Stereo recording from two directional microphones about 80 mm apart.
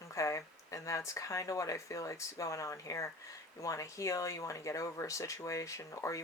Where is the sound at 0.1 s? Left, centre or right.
Left.